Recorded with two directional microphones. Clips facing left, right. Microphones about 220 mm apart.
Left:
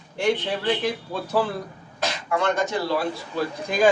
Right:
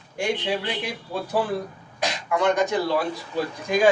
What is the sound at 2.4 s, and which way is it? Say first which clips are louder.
Speech: right 3 dB; 15° right (ahead or behind).